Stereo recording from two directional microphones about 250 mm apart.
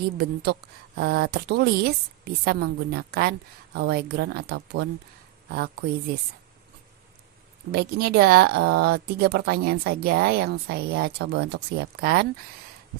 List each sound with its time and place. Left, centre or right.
0.5 s speech: right
7.7 s speech: right